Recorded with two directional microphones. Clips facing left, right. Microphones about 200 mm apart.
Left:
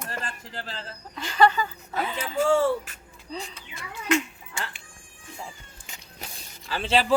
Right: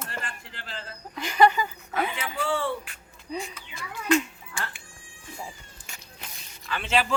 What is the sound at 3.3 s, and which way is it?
Speech, 10° right (ahead or behind).